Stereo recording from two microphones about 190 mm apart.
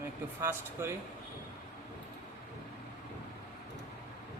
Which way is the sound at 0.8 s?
15° right (ahead or behind).